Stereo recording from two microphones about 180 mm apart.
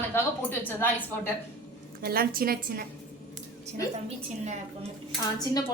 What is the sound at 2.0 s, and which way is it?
Speech, 55° right (ahead or behind).